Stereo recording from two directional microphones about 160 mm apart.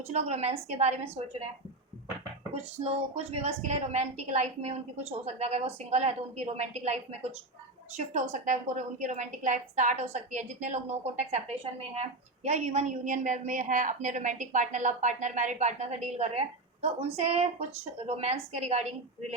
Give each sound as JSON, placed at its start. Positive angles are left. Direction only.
{"t": 0.1, "sound": "a woman's voice", "side_deg": -40}
{"t": 2.7, "sound": "a woman's voice", "side_deg": -40}